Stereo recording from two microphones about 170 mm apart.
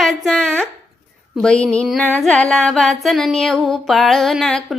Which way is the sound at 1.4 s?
5° left (ahead or behind).